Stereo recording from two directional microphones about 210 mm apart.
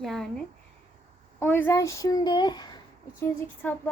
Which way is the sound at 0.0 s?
Centre (ahead or behind).